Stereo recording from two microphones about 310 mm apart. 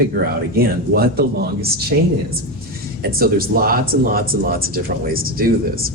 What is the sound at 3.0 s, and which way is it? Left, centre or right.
Speech, right.